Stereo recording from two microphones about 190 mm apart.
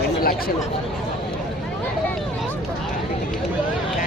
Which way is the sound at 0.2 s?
50° left (ahead or behind).